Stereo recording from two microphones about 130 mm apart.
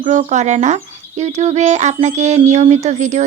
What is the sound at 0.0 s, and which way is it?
Speech, 70° right (ahead or behind).